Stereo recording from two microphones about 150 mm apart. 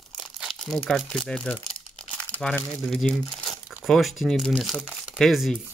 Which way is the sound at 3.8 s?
Centre (ahead or behind).